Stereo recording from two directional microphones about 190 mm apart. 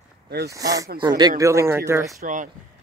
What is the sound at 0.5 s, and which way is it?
Speech, 15° right (ahead or behind).